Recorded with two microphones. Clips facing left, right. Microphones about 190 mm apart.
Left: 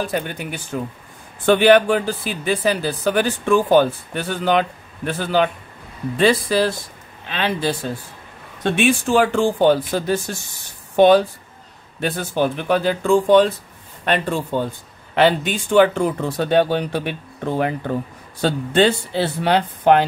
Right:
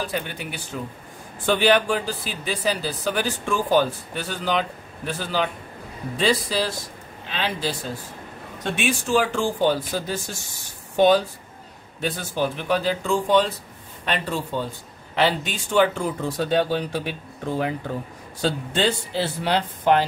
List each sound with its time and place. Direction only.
0.0 s speech: 50° left (ahead or behind)